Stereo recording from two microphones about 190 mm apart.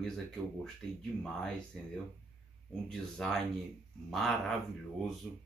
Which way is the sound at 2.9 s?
Centre (ahead or behind).